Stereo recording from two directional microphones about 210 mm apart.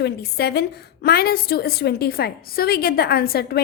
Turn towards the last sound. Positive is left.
turn(degrees=45)  # may be behind; listen again after turning